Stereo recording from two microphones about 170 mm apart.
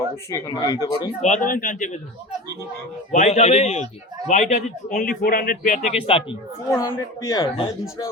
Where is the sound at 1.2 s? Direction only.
45° left (ahead or behind).